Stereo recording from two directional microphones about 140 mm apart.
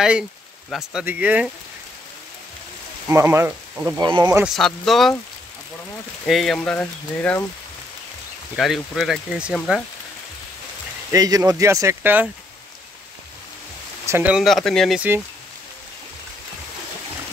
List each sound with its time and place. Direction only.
0.7 s speech: 5° right (ahead or behind)
3.1 s speech: 20° right (ahead or behind)
4.0 s speech: 30° right (ahead or behind)
4.6 s speech: centre (ahead or behind)
6.2 s speech: centre (ahead or behind)
8.5 s speech: centre (ahead or behind)
11.1 s speech: 25° right (ahead or behind)
14.0 s speech: 15° right (ahead or behind)
14.3 s speech: centre (ahead or behind)
15.0 s speech: 15° right (ahead or behind)